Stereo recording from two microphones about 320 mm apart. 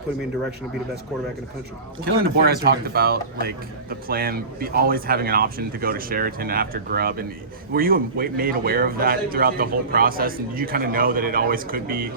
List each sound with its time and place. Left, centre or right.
2.2 s a man's voice: right